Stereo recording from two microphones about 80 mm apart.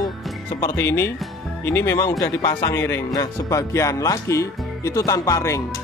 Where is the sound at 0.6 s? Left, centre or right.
Left.